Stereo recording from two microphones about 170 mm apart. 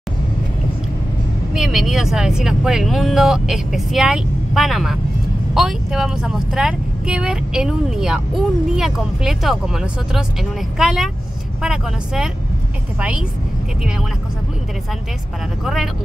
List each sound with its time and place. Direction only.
1.5 s speech: centre (ahead or behind)
15.6 s speech: centre (ahead or behind)